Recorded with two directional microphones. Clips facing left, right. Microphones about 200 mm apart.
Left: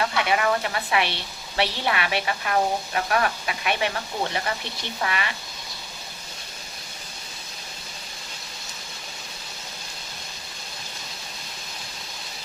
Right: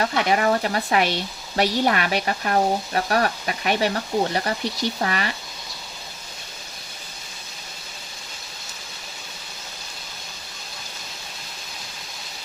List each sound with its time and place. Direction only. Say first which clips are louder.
0.0 s speech: right 3 dB; 40° right (ahead or behind)